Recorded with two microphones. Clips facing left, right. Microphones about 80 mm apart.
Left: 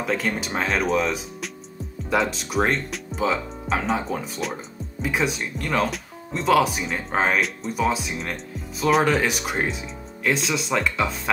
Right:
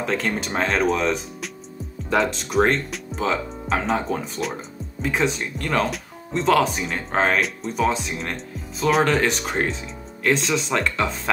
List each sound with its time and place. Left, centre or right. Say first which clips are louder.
0.0 s speech: right 1 dB; centre